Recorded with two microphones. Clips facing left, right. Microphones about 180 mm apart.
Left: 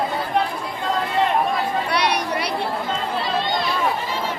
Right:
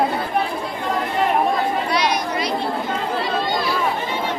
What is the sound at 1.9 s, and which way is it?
Chatter, 60° left (ahead or behind).